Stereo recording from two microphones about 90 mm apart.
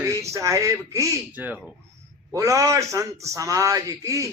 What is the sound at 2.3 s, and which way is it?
A man's voice, 35° right (ahead or behind).